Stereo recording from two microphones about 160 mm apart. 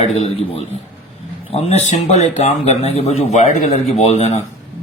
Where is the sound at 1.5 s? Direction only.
40° left (ahead or behind).